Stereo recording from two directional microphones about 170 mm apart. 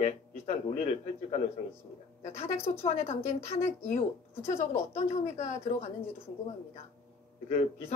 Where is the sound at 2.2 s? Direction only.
40° left (ahead or behind).